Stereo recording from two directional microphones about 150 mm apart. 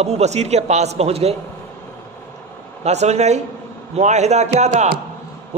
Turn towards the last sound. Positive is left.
turn(degrees=-50)  # may be behind; listen again after turning